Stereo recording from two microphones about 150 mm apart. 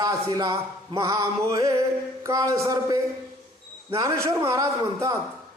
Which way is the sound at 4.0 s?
20° right (ahead or behind).